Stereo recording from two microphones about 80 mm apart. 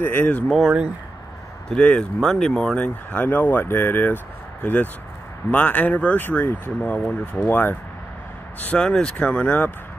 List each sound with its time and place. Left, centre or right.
0.0 s speech: left
0.5 s speech: centre
1.7 s speech: centre
2.1 s speech: centre
2.7 s speech: centre
5.5 s speech: left
6.8 s speech: centre
7.4 s speech: left
8.8 s speech: centre